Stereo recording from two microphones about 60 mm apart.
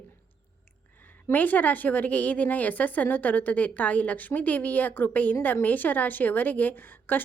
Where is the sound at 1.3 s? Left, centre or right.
Left.